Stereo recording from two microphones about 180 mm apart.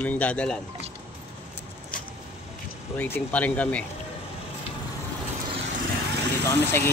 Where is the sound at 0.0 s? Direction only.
10° left (ahead or behind).